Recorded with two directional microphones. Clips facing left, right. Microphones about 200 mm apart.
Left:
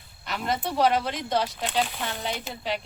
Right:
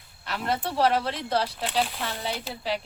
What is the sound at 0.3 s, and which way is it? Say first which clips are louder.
Speech: even; 5° right (ahead or behind).